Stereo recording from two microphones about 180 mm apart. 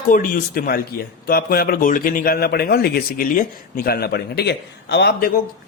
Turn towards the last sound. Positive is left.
turn(degrees=65)  # may be behind; listen again after turning